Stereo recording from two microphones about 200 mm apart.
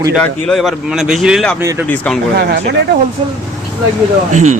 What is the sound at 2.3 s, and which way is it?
Speech, 55° right (ahead or behind).